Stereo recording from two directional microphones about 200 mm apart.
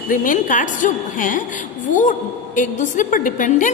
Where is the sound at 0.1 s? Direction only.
40° left (ahead or behind).